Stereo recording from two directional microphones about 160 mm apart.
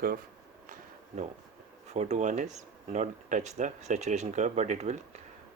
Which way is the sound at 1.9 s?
45° right (ahead or behind).